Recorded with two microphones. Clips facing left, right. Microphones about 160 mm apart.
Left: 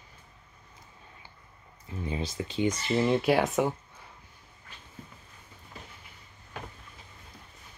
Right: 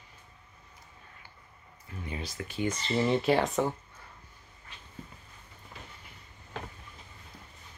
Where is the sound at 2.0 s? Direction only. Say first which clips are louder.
Left 5 dB; 25° left (ahead or behind); by 3.6 s centre (ahead or behind).